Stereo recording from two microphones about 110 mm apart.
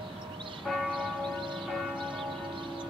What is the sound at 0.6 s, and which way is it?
Church bell, centre (ahead or behind).